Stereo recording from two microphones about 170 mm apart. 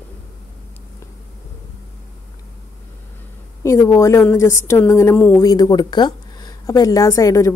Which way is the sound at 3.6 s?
20° left (ahead or behind).